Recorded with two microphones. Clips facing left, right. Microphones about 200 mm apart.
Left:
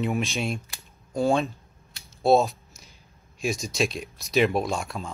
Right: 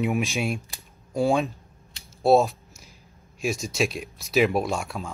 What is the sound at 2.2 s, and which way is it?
Scissors, 5° right (ahead or behind).